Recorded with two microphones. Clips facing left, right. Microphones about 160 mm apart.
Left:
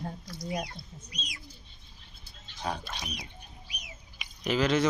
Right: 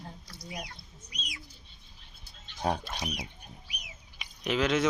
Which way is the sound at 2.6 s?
45° right (ahead or behind).